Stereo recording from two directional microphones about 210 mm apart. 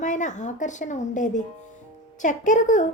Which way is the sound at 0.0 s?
35° left (ahead or behind).